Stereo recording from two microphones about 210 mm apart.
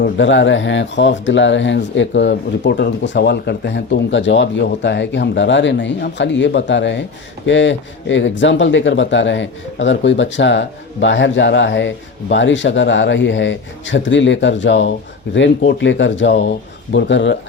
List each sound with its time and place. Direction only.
0.0 s speech: 60° left (ahead or behind)